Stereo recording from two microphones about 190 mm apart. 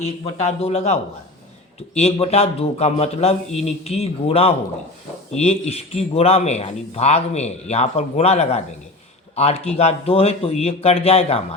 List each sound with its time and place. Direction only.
0.0 s speech: 35° left (ahead or behind)
2.0 s speech: 30° left (ahead or behind)